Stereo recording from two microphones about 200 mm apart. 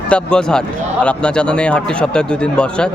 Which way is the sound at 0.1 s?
5° left (ahead or behind).